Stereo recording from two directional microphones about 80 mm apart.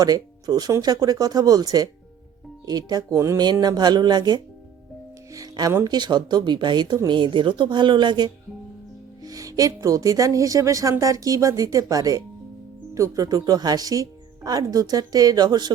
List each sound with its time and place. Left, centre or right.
0.0 s speech: right
3.3 s speech: right
5.8 s speech: right
7.1 s speech: right
9.2 s speech: right